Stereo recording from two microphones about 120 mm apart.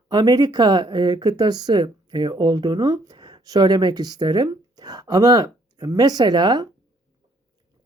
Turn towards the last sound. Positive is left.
turn(degrees=-35)  # may be behind; listen again after turning